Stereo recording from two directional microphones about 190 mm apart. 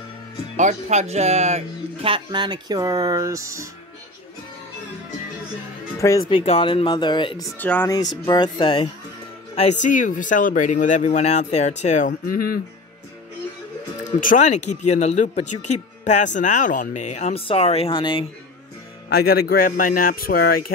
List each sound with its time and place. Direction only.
0.6 s speech: 40° right (ahead or behind); by 3.6 s 15° right (ahead or behind)
5.9 s speech: 15° left (ahead or behind)
7.5 s speech: 10° left (ahead or behind)
7.9 s speech: 20° left (ahead or behind)
9.6 s speech: 40° left (ahead or behind)
14.2 s speech: 40° left (ahead or behind); by 18.2 s 25° left (ahead or behind)
19.4 s speech: 50° left (ahead or behind)